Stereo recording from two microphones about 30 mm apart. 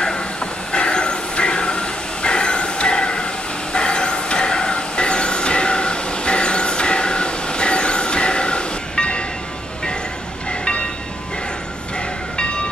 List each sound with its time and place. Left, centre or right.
0.7 s train: left